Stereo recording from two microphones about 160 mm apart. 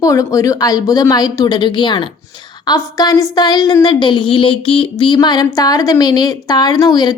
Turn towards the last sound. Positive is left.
turn(degrees=25)  # may be behind; listen again after turning